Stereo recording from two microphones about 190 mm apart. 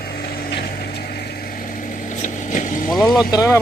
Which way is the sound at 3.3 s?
20° left (ahead or behind).